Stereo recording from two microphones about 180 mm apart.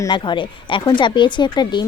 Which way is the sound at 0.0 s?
25° left (ahead or behind).